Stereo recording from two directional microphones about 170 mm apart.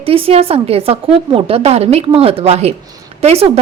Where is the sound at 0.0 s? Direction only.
35° right (ahead or behind).